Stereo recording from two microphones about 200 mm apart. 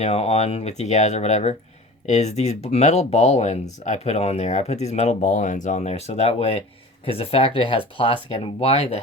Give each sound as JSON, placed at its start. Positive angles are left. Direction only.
{"t": 0.0, "sound": "speech", "side_deg": 30}